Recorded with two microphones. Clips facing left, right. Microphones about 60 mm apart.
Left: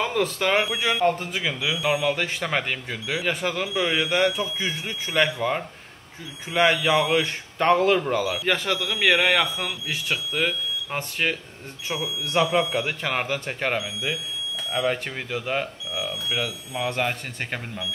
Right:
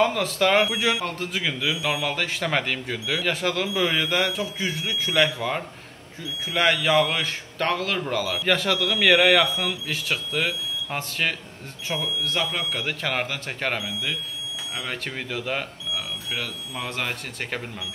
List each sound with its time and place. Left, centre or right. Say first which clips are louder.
0.0 s a man's voice: right 2 dB; centre
12.8 s a man's voice: even; centre